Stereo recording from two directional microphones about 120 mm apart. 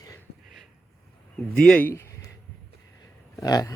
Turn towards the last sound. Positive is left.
turn(degrees=30)  # may be behind; listen again after turning